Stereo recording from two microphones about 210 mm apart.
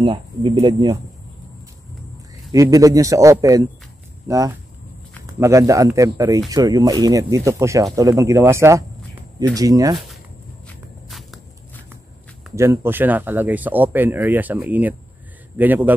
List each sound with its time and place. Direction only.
0.0 s speech: 25° right (ahead or behind)
2.5 s speech: 15° right (ahead or behind)
10.7 s walk: centre (ahead or behind)
12.5 s speech: 10° right (ahead or behind)